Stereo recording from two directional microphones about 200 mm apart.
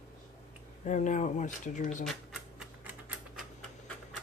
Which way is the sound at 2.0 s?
Centre (ahead or behind).